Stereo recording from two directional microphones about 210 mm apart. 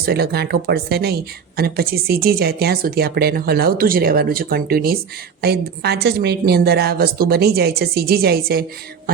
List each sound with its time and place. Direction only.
0.0 s speech: 50° right (ahead or behind)